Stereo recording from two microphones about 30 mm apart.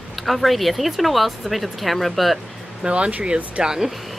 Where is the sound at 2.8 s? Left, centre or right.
Right.